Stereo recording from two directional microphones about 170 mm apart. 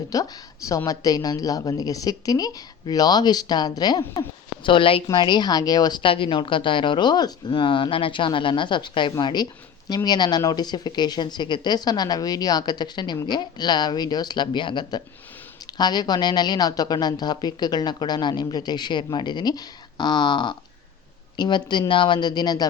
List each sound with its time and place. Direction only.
0.1 s speech: 20° left (ahead or behind)